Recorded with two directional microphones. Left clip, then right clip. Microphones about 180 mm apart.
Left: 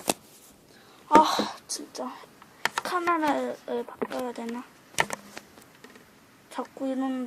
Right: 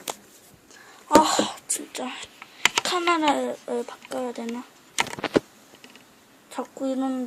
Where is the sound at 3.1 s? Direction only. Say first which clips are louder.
Right 3 dB; 15° right (ahead or behind).